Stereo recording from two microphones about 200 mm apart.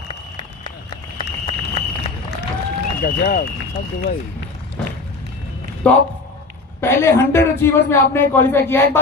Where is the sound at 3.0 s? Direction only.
50° left (ahead or behind).